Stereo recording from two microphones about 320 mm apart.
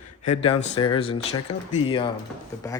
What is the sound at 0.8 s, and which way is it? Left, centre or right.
Speech, centre.